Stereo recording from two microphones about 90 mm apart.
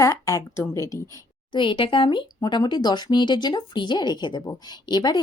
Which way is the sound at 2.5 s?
55° left (ahead or behind).